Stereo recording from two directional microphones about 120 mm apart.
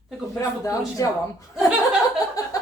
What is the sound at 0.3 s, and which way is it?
Speech, 25° left (ahead or behind).